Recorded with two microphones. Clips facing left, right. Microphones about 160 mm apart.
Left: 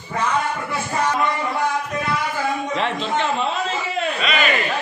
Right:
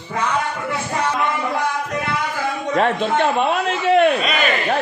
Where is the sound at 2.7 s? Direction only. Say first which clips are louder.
Right 5 dB; 50° right (ahead or behind); by 4.1 s 70° right (ahead or behind).